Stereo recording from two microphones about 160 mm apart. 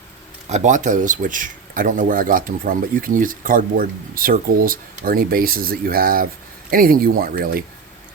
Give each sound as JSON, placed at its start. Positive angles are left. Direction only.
{"t": 0.4, "sound": "speech", "side_deg": -45}